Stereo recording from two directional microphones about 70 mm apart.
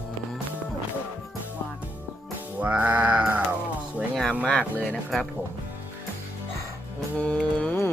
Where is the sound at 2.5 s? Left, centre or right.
Right.